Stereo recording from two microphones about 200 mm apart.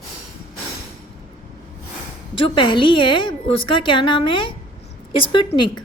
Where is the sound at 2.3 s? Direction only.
25° left (ahead or behind).